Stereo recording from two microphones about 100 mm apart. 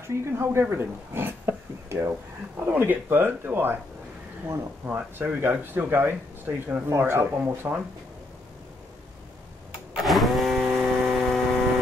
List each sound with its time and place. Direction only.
0.0 s speech: 25° right (ahead or behind)
4.8 s speech: 20° right (ahead or behind)
10.0 s a sound: centre (ahead or behind)